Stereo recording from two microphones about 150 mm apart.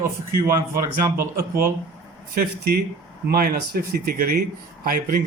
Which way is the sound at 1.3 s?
75° right (ahead or behind).